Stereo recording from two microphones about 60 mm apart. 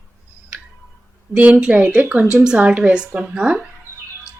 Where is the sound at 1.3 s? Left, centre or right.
Right.